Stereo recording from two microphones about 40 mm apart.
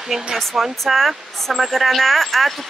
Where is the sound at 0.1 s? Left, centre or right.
Centre.